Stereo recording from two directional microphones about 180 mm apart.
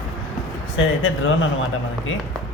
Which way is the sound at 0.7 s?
90° left.